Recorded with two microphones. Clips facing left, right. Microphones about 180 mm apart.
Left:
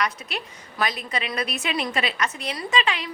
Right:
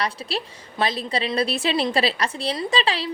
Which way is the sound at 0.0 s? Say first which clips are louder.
Right 2 dB; 30° right (ahead or behind).